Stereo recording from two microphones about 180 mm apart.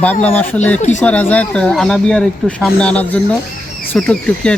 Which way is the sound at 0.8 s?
40° left (ahead or behind).